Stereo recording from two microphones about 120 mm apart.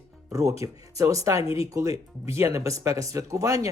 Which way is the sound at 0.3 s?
25° right (ahead or behind).